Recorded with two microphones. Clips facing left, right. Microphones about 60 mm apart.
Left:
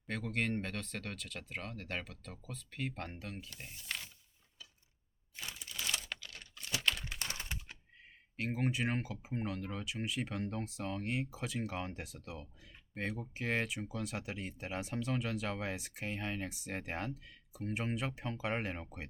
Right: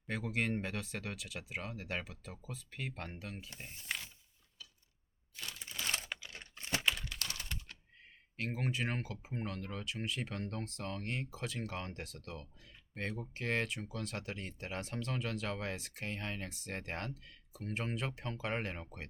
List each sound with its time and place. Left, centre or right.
0.1 s speech: centre
3.8 s wild animals: centre
5.8 s typing: right
6.1 s computer keyboard: centre
7.0 s typing: left
8.4 s speech: centre